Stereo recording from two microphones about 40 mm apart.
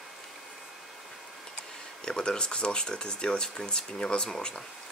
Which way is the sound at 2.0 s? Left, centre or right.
Centre.